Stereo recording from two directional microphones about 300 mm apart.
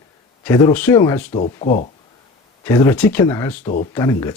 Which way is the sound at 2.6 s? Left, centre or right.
Centre.